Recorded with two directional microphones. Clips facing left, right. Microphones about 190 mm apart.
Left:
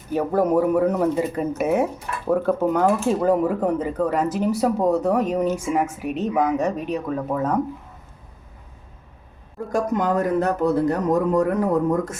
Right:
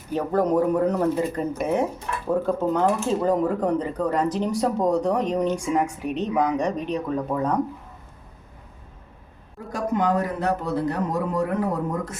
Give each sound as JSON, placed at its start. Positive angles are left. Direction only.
{"t": 0.1, "sound": "speech", "side_deg": 10}
{"t": 9.7, "sound": "speech", "side_deg": 45}